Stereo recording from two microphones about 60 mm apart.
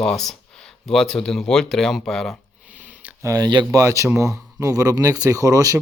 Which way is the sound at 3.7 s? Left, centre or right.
Right.